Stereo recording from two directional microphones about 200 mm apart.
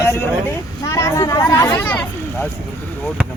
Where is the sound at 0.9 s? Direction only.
15° left (ahead or behind).